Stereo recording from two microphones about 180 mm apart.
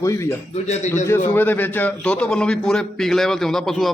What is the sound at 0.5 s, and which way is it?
Speech, 40° left (ahead or behind).